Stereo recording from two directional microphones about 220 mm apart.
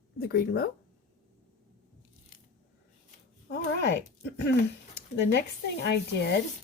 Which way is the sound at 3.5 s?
50° left (ahead or behind).